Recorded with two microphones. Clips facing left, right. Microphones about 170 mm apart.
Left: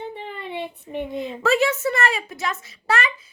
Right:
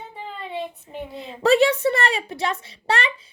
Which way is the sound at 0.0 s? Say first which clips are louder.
Left 5 dB; 65° left (ahead or behind).